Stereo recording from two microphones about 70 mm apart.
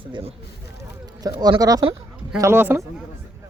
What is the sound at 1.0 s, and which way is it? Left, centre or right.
Speech, right.